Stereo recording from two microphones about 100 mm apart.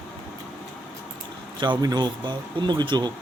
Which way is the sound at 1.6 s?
45° right (ahead or behind).